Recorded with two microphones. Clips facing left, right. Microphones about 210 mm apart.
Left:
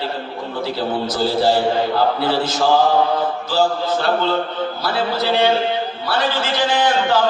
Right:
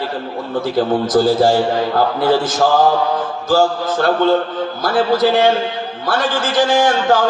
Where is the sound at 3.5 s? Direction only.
50° right (ahead or behind).